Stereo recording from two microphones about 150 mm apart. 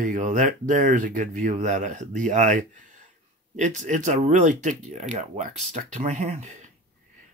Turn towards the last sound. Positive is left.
turn(degrees=-50)  # may be behind; listen again after turning